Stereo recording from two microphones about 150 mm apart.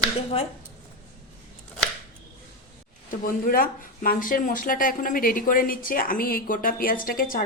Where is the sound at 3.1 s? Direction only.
70° left (ahead or behind).